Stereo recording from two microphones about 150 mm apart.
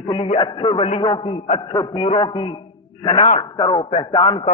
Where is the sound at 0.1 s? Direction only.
35° left (ahead or behind).